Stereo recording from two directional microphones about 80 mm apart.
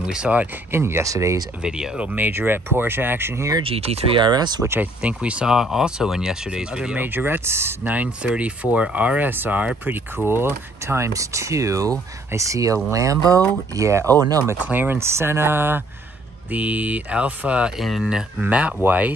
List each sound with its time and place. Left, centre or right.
0.0 s speech: centre
0.7 s speech: right
1.6 s speech: centre; by 3.4 s right
4.2 s speech: right
5.0 s speech: centre
7.0 s speech: right
7.8 s speech: centre; by 14.0 s right
14.6 s speech: right
17.7 s speech: centre
18.4 s speech: centre